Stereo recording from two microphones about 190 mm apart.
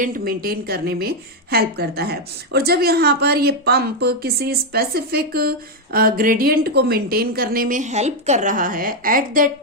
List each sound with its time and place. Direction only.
0.0 s a woman's voice: 50° right (ahead or behind)